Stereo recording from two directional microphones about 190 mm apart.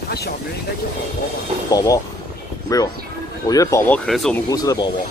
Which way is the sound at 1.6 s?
20° left (ahead or behind).